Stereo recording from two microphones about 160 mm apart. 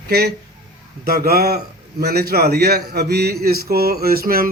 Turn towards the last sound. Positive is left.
turn(degrees=-65)  # may be behind; listen again after turning